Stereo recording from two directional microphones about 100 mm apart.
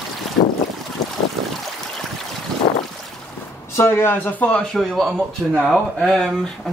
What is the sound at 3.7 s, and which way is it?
Speech, 25° left (ahead or behind).